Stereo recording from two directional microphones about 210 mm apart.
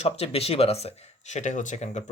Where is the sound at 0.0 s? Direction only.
30° left (ahead or behind).